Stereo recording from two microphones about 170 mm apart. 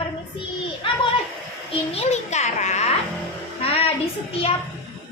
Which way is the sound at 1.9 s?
40° left (ahead or behind).